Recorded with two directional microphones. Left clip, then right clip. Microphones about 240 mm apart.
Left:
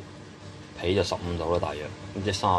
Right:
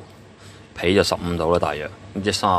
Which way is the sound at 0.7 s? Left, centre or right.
Right.